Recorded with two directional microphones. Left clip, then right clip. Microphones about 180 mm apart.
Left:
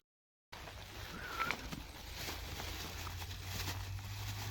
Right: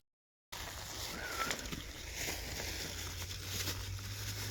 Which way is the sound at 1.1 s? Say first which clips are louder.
Even; 5° right (ahead or behind).